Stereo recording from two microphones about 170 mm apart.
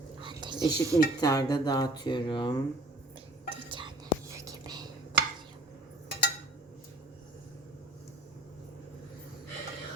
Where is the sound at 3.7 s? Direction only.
30° right (ahead or behind).